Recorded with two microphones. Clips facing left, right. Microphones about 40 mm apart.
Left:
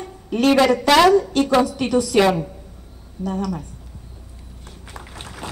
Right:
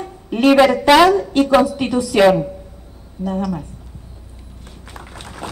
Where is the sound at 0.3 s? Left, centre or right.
Centre.